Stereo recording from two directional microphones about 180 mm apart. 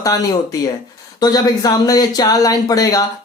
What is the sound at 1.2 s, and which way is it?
Speech, 20° left (ahead or behind).